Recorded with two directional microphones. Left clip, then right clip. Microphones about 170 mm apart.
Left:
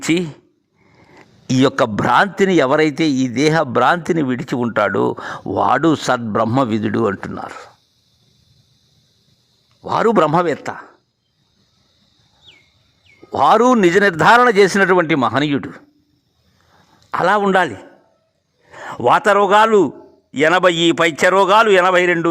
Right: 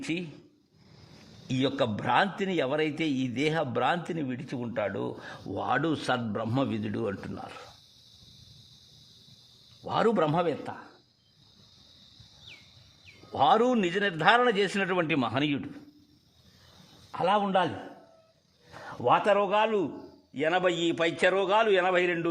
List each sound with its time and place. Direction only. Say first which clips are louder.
0.0 s speech: left 16 dB; 55° left (ahead or behind)
1.5 s a man's voice: left 13 dB; 50° left (ahead or behind)
9.8 s a man's voice: left 11 dB; 45° left (ahead or behind)
13.3 s a man's voice: left 11 dB; 50° left (ahead or behind)
17.1 s a man's voice: left 12 dB; 60° left (ahead or behind)
18.8 s a man's voice: left 11 dB; 60° left (ahead or behind)